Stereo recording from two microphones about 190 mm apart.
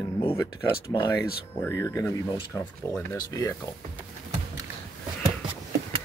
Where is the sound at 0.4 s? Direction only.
15° left (ahead or behind).